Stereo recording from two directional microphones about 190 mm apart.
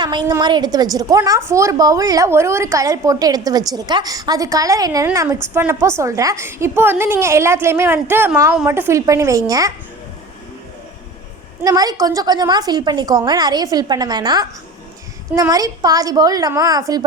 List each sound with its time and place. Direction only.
0.0 s a woman's voice: 25° right (ahead or behind)
11.6 s a woman's voice: 20° right (ahead or behind)